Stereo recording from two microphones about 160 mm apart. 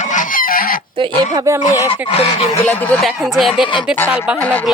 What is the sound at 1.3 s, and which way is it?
Speech, 20° right (ahead or behind).